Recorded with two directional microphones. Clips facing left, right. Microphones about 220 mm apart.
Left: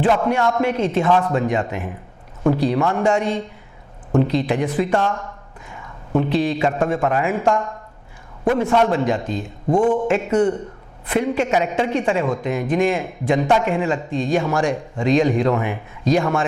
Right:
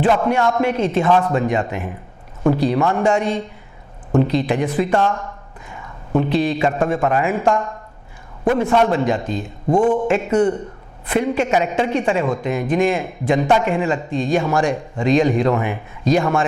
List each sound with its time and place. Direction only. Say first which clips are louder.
0.0 s a man's voice: right 1 dB; 15° right (ahead or behind)
9.6 s speech: right 1 dB; 35° right (ahead or behind)
10.1 s a man's voice: right 1 dB; 10° right (ahead or behind)